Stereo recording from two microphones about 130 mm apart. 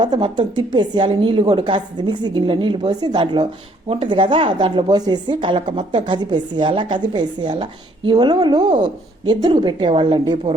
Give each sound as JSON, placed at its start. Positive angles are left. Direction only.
{"t": 0.0, "sound": "speech", "side_deg": -35}